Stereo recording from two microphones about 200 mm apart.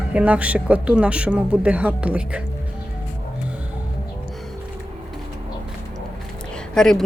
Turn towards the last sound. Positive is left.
turn(degrees=5)  # may be behind; listen again after turning